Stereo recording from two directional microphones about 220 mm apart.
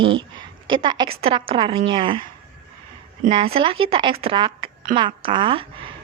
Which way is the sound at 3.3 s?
25° right (ahead or behind).